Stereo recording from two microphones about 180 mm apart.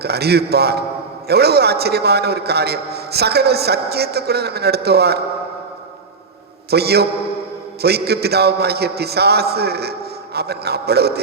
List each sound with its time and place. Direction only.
0.0 s a man's voice: 65° right (ahead or behind)
6.7 s a man's voice: 65° right (ahead or behind)